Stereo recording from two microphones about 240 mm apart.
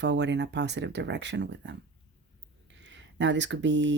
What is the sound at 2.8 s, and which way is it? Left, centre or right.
Speech, right.